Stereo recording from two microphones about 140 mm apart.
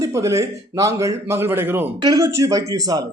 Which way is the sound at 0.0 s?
20° right (ahead or behind).